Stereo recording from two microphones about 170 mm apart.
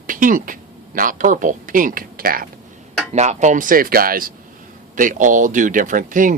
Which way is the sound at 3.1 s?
45° right (ahead or behind).